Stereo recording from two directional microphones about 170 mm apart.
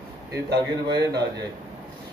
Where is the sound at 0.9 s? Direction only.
25° right (ahead or behind).